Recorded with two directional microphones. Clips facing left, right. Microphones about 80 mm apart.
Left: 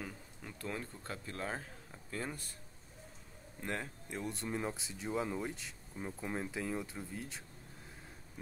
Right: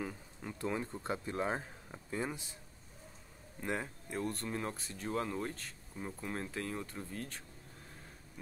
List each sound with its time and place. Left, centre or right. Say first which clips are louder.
0.0 s speech: right 4 dB; centre
3.6 s speech: right 2 dB; centre